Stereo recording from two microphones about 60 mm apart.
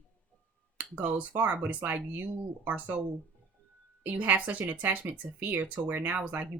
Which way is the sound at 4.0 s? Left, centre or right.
Right.